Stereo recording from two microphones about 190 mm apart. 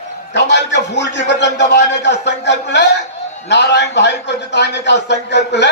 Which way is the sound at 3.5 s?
65° left (ahead or behind).